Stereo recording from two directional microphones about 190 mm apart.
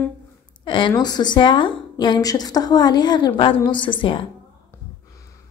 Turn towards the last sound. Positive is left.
turn(degrees=25)  # may be behind; listen again after turning